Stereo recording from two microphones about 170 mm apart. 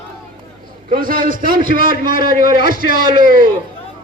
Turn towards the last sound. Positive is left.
turn(degrees=-55)  # may be behind; listen again after turning